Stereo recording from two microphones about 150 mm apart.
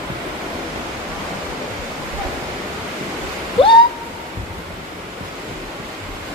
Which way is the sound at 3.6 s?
35° left (ahead or behind).